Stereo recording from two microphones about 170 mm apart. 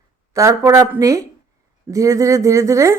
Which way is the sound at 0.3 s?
15° right (ahead or behind).